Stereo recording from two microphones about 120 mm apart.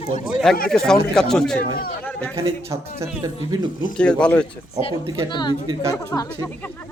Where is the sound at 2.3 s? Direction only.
25° right (ahead or behind).